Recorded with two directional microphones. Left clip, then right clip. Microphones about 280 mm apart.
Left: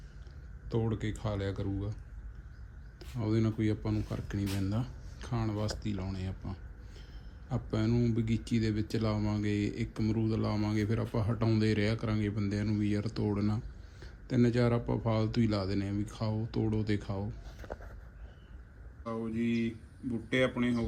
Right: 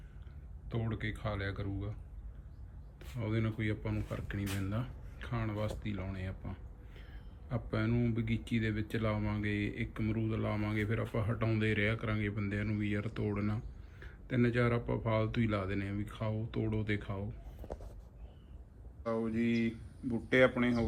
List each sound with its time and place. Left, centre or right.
0.7 s speech: centre
3.2 s speech: centre
17.6 s a sound: right
19.0 s speech: centre